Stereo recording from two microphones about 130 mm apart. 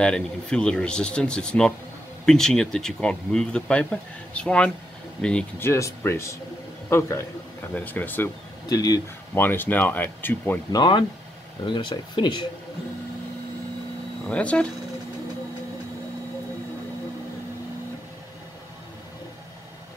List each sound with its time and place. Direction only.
0.0 s speech: 5° left (ahead or behind)
5.6 s speech: 20° left (ahead or behind)
8.6 s speech: 30° left (ahead or behind)
9.3 s speech: 15° left (ahead or behind)
10.7 s speech: 35° left (ahead or behind)
14.2 s speech: 10° left (ahead or behind)